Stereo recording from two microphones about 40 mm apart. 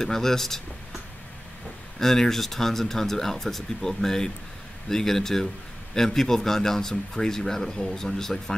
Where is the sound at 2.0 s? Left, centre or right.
Centre.